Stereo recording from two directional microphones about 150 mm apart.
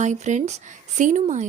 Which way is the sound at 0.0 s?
55° right (ahead or behind).